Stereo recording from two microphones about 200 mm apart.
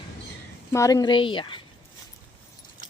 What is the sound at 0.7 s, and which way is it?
Speech, 15° left (ahead or behind).